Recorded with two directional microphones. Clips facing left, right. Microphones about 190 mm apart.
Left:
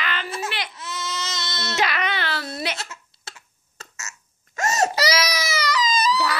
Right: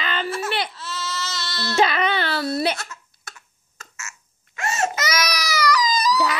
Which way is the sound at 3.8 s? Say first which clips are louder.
Even; 40° left (ahead or behind).